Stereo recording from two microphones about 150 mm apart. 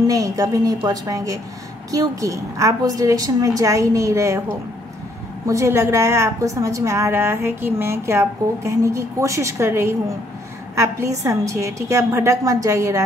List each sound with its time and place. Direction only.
0.0 s a woman's voice: 25° right (ahead or behind)
5.5 s a woman's voice: 20° right (ahead or behind)